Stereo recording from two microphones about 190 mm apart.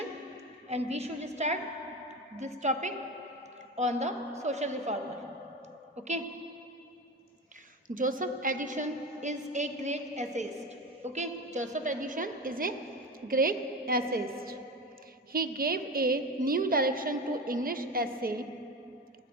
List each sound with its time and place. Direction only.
0.7 s a woman's voice: 35° right (ahead or behind)
7.9 s a woman's voice: 45° right (ahead or behind)